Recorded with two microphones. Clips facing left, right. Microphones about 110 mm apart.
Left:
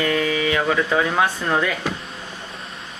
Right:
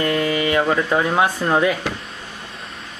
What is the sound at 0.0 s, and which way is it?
Speech, 5° right (ahead or behind).